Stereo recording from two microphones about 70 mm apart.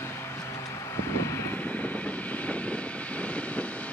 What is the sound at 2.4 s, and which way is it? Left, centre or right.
Vehicle, centre.